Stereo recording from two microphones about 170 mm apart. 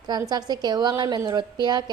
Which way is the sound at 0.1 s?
25° right (ahead or behind).